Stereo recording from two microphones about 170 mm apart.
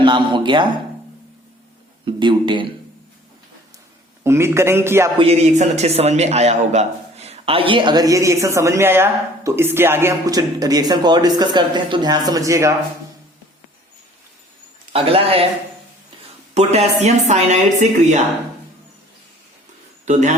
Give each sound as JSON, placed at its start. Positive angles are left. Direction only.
{"t": 0.0, "sound": "a man's voice", "side_deg": -30}
{"t": 2.0, "sound": "a man's voice", "side_deg": -30}
{"t": 4.2, "sound": "a man's voice", "side_deg": -15}
{"t": 5.1, "sound": "a man's voice", "side_deg": -35}
{"t": 14.9, "sound": "speech", "side_deg": -35}
{"t": 16.6, "sound": "a woman's voice", "side_deg": -40}
{"t": 20.1, "sound": "speech", "side_deg": -45}